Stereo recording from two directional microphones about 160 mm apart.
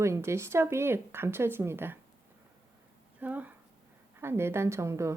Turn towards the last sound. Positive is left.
turn(degrees=-20)  # may be behind; listen again after turning